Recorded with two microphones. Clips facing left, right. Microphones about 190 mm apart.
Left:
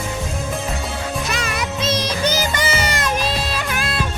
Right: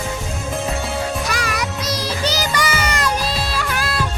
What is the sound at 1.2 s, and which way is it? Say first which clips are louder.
Music: right 1 dB; 25° left (ahead or behind).